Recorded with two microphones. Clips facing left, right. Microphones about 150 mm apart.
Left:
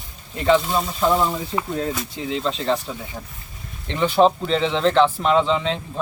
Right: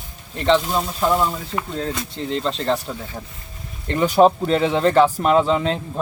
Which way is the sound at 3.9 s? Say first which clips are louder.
Right 2 dB; 10° right (ahead or behind).